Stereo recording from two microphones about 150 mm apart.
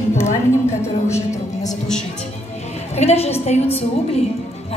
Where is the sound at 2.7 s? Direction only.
45° left (ahead or behind).